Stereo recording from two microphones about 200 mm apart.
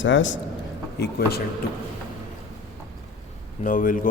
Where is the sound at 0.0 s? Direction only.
70° left (ahead or behind).